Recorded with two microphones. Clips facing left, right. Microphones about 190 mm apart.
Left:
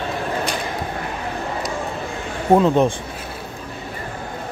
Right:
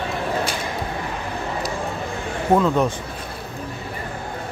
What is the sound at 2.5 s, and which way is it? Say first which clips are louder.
Speech: left 3 dB; 20° left (ahead or behind).